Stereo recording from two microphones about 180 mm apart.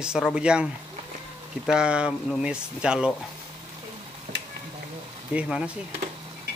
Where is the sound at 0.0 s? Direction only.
5° right (ahead or behind).